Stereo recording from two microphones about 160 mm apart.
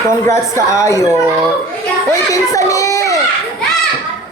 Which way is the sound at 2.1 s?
20° left (ahead or behind).